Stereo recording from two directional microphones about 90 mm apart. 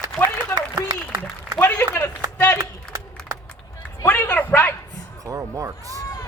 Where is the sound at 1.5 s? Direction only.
25° left (ahead or behind).